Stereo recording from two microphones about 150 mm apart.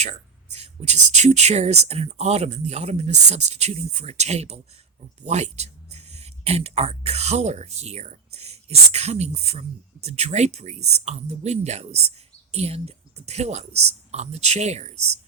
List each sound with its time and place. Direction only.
0.0 s speech: 50° right (ahead or behind)